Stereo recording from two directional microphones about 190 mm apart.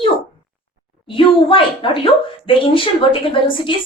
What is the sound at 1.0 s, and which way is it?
A woman's voice, 30° left (ahead or behind).